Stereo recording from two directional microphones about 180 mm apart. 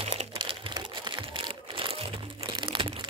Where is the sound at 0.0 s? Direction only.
30° right (ahead or behind).